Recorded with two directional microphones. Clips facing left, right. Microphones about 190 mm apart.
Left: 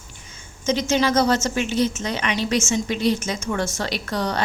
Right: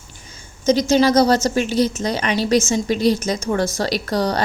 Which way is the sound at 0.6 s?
35° right (ahead or behind).